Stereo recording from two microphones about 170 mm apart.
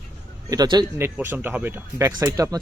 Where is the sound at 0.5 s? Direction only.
25° right (ahead or behind).